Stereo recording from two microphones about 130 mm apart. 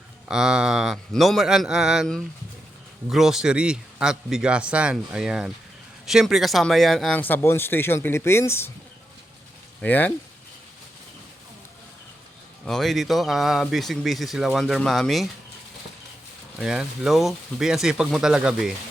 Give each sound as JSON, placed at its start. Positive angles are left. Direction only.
{"t": 0.3, "sound": "a man's voice", "side_deg": -5}
{"t": 7.2, "sound": "speech", "side_deg": 15}
{"t": 9.8, "sound": "speech", "side_deg": 10}
{"t": 12.6, "sound": "a man's voice", "side_deg": 5}
{"t": 16.6, "sound": "a man's voice", "side_deg": -5}